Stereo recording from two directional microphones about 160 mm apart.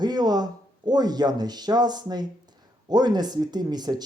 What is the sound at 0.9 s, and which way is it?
Speech, 25° right (ahead or behind).